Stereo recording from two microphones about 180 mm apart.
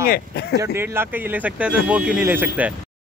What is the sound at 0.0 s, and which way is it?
Speech, 60° left (ahead or behind).